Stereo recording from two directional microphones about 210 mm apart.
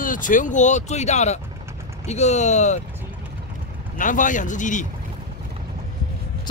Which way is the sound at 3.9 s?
40° left (ahead or behind).